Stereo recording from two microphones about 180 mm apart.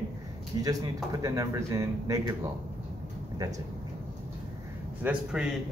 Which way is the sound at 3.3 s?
20° right (ahead or behind).